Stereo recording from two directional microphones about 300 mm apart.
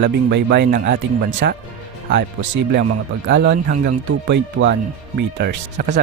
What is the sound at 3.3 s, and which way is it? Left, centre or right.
Speech, right.